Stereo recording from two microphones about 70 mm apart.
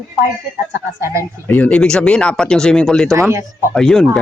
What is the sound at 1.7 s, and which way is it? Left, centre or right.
Speech, centre.